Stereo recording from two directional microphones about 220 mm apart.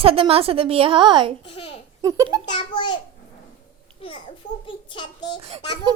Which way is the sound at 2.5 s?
20° left (ahead or behind).